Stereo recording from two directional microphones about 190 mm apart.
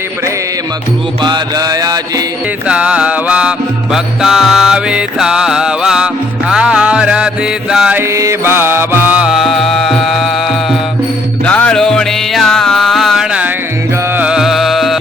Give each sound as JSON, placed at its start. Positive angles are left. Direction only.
{"t": 1.2, "sound": "music", "side_deg": -20}
{"t": 2.6, "sound": "music", "side_deg": -5}
{"t": 3.9, "sound": "mantra", "side_deg": 0}
{"t": 11.4, "sound": "music", "side_deg": 5}